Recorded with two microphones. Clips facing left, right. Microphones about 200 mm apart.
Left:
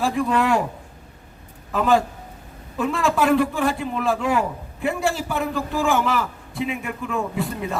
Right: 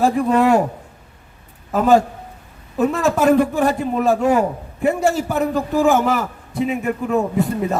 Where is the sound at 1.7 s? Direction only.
40° right (ahead or behind).